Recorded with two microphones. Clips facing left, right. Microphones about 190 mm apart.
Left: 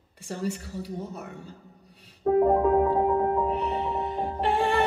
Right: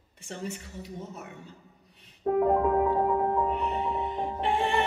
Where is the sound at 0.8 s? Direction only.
35° left (ahead or behind).